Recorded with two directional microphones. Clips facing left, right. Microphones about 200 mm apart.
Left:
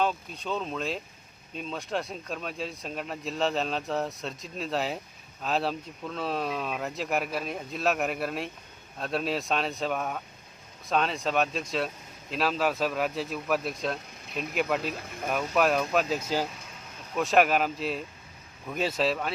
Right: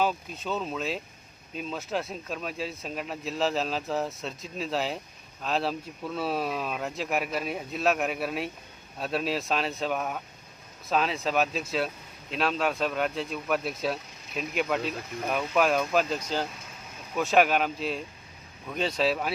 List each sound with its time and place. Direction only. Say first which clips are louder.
0.0 s speech: right 1 dB; 5° right (ahead or behind)